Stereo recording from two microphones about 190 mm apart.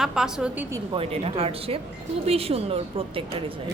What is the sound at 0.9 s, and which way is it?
A woman's voice, 30° right (ahead or behind).